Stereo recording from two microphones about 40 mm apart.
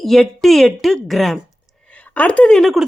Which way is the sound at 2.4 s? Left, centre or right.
Centre.